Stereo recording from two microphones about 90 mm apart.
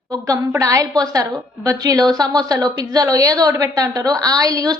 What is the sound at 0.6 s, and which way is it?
A woman's voice, 40° right (ahead or behind).